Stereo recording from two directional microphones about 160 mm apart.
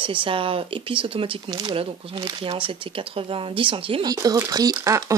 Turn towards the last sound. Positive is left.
turn(degrees=-20)  # may be behind; listen again after turning